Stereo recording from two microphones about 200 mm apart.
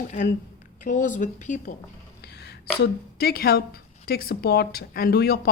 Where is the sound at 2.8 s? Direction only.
50° left (ahead or behind).